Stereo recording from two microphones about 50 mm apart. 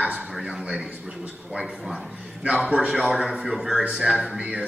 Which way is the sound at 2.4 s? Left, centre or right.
Right.